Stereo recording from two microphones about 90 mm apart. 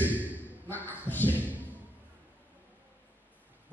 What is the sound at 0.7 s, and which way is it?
Speech, 20° left (ahead or behind).